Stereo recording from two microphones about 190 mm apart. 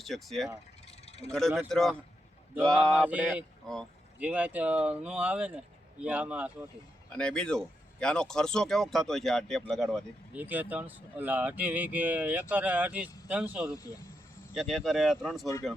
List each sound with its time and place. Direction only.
0.0 s speech: centre (ahead or behind)
1.0 s a sound: 35° left (ahead or behind)
1.3 s speech: centre (ahead or behind)
2.9 s speech: 10° right (ahead or behind)
7.1 s speech: 5° left (ahead or behind)